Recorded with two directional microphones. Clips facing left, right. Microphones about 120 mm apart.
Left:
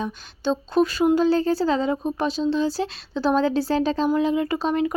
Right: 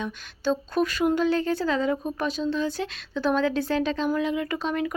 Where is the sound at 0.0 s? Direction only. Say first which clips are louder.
Left 2 dB; 30° left (ahead or behind).